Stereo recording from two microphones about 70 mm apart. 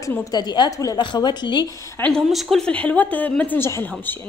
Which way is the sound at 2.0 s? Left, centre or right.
Left.